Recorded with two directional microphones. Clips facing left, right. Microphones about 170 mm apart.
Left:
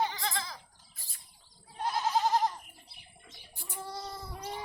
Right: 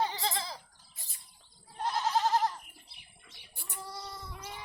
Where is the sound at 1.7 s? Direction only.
10° left (ahead or behind).